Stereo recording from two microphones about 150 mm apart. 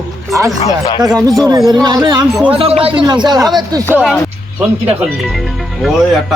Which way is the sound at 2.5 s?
35° right (ahead or behind).